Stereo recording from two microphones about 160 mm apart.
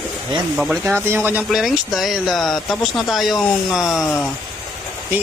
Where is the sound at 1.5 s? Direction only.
Centre (ahead or behind).